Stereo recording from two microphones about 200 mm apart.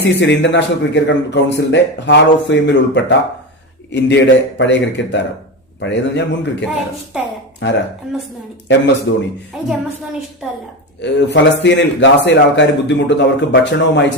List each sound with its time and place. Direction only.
0.0 s a man's voice: 60° left (ahead or behind)
8.1 s a woman's voice: centre (ahead or behind)
9.1 s a man's voice: 70° left (ahead or behind)
9.5 s a woman's voice: centre (ahead or behind)
11.0 s a man's voice: 60° left (ahead or behind)